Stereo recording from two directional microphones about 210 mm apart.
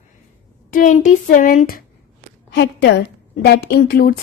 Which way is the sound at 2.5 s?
55° left (ahead or behind).